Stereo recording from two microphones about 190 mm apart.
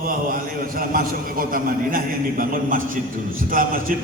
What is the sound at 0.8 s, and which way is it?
A man's voice, 50° right (ahead or behind).